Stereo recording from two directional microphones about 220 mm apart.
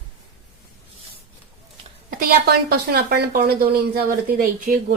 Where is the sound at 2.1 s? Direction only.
40° right (ahead or behind).